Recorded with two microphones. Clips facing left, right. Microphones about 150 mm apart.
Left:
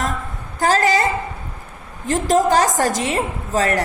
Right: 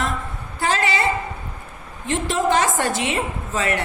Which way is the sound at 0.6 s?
40° left (ahead or behind).